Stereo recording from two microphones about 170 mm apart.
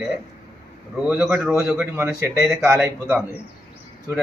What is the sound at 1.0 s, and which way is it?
A man's voice, 5° right (ahead or behind).